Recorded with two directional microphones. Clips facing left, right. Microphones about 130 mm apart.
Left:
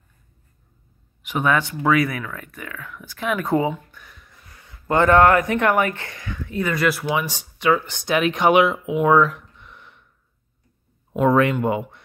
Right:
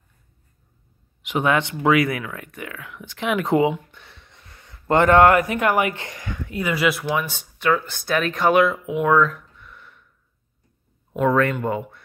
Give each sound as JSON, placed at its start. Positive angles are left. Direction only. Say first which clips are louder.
{"t": 1.3, "sound": "speech", "louder": "even", "side_deg": -25}
{"t": 3.9, "sound": "a sound", "louder": "even", "side_deg": -30}
{"t": 5.8, "sound": "speech", "louder": "even", "side_deg": -15}
{"t": 6.7, "sound": "speech", "louder": "right 1 dB", "side_deg": 0}
{"t": 8.8, "sound": "a sound", "louder": "left 2 dB", "side_deg": 5}
{"t": 11.1, "sound": "speech", "louder": "left 2 dB", "side_deg": 10}